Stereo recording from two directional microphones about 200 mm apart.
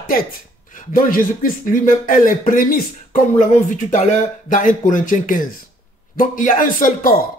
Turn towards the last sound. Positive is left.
turn(degrees=45)  # may be behind; listen again after turning